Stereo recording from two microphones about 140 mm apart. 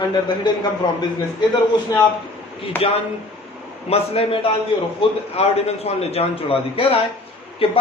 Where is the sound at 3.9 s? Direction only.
45° left (ahead or behind).